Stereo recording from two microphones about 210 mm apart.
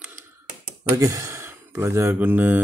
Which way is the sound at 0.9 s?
15° right (ahead or behind).